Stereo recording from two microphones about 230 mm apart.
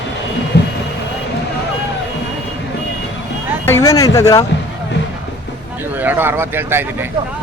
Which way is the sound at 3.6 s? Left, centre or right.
Centre.